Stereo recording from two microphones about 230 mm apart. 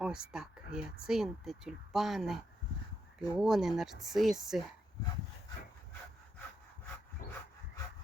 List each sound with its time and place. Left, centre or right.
0.0 s speech: centre
7.2 s dog: left